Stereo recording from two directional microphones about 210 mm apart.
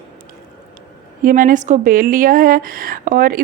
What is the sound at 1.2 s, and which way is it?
A woman's voice, 40° right (ahead or behind).